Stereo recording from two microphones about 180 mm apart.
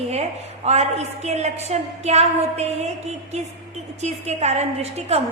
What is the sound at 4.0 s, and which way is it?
A woman's voice, 40° right (ahead or behind).